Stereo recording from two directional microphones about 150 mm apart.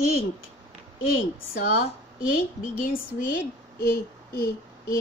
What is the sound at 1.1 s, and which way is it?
A woman's voice, 70° left (ahead or behind).